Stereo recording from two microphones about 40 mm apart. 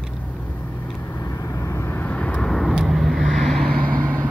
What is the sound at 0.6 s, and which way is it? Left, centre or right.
Vehicle, left.